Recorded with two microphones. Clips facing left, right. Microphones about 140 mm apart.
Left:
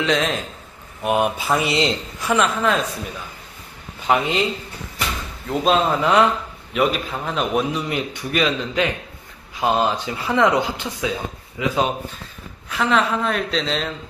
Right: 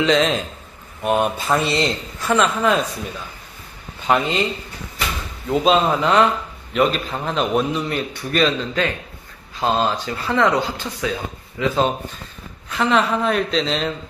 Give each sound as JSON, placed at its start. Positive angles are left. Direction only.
{"t": 0.0, "sound": "a man's voice", "side_deg": 0}
{"t": 2.2, "sound": "a man's voice", "side_deg": 0}
{"t": 4.1, "sound": "a man's voice", "side_deg": 5}
{"t": 5.5, "sound": "a man's voice", "side_deg": 0}
{"t": 11.6, "sound": "a man's voice", "side_deg": 5}